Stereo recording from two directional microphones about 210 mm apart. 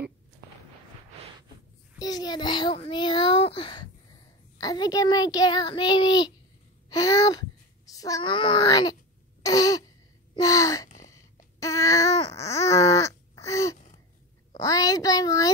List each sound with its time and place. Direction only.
2.0 s a child's voice: 20° left (ahead or behind)
9.4 s a sound: 15° left (ahead or behind)
10.3 s a child's voice: 15° left (ahead or behind)
11.6 s baby cry: 15° left (ahead or behind)
13.7 s gasp: 35° left (ahead or behind)
14.6 s a child's voice: 15° left (ahead or behind)